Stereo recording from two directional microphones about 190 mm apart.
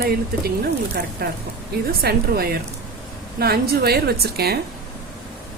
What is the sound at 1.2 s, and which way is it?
A woman's voice, 55° right (ahead or behind).